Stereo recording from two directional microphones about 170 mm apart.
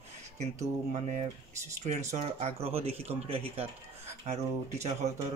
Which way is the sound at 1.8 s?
40° right (ahead or behind).